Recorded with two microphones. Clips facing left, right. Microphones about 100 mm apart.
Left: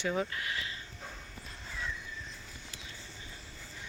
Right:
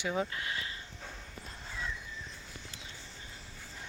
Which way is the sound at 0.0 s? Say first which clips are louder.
Left 1 dB; 15° right (ahead or behind).